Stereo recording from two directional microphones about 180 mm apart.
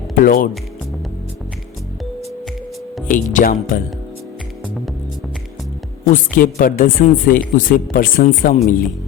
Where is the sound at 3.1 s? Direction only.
50° left (ahead or behind).